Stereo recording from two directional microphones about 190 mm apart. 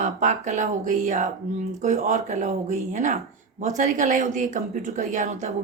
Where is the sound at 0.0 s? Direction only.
40° right (ahead or behind).